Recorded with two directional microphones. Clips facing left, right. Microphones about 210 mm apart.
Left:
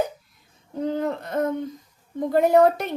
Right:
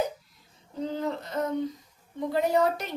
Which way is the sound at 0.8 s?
55° left (ahead or behind).